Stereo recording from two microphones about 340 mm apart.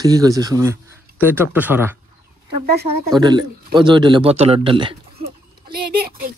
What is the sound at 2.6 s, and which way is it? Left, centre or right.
Speech, right.